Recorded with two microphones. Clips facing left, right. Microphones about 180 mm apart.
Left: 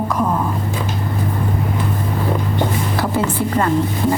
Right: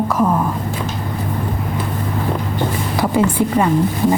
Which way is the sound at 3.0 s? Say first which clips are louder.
Right 6 dB; 10° right (ahead or behind).